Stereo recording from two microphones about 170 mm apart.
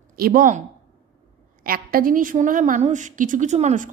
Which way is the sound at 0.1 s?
60° right (ahead or behind).